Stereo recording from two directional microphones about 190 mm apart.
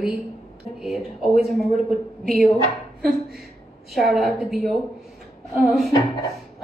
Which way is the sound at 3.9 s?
Centre (ahead or behind).